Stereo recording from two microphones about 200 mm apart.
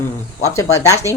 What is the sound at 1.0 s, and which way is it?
Speech, 15° right (ahead or behind).